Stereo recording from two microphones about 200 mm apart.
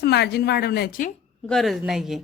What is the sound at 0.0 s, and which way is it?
A woman's voice, 55° left (ahead or behind).